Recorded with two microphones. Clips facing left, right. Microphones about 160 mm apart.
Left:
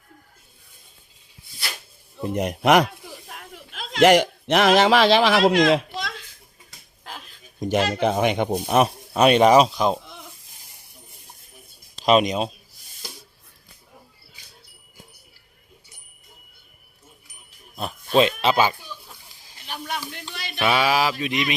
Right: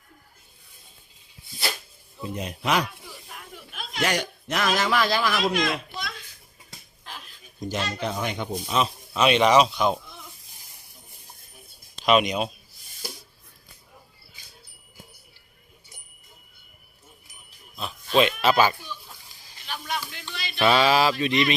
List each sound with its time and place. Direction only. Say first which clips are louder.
2.2 s speech: left 8 dB; 65° left (ahead or behind)
3.2 s a man's voice: left 2 dB; 80° left
7.7 s speech: left 8 dB; 65° left (ahead or behind)
9.1 s speech: left 4 dB; 45° left (ahead or behind)
12.0 s speech: left 3 dB; 35° left (ahead or behind)
18.1 s a sound: left 2 dB; 35° left (ahead or behind)
20.3 s music: left 1 dB; 60° left (ahead or behind)
20.6 s a sound: right 1 dB; 10° left (ahead or behind)